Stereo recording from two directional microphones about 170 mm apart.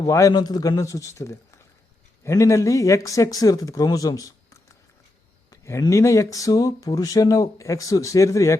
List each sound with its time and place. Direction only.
0.0 s speech: 20° left (ahead or behind)
5.5 s speech: 15° left (ahead or behind)